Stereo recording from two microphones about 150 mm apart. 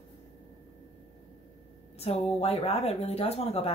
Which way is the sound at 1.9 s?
45° left (ahead or behind).